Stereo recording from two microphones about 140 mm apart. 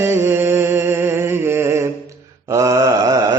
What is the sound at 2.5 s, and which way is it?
Wail, 25° right (ahead or behind).